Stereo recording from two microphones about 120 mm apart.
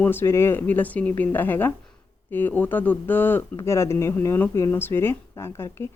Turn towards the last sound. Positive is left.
turn(degrees=20)  # may be behind; listen again after turning